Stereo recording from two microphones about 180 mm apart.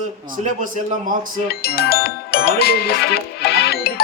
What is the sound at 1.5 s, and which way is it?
Speech, 60° left (ahead or behind).